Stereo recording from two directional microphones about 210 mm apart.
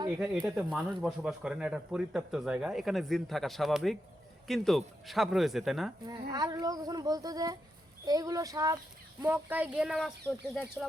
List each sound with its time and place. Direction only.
0.4 s speech: 5° right (ahead or behind)
6.1 s speech: 20° right (ahead or behind); by 10.8 s 5° left (ahead or behind)